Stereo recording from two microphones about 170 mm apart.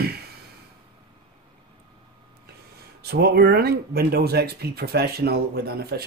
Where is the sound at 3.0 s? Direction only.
70° right (ahead or behind).